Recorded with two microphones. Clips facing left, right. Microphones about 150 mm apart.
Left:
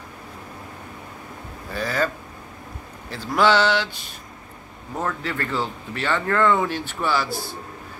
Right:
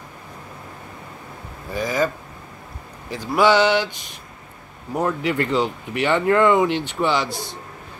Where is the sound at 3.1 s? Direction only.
15° right (ahead or behind).